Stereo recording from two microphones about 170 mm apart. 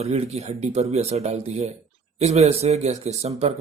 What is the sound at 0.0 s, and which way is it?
Speech, 40° right (ahead or behind).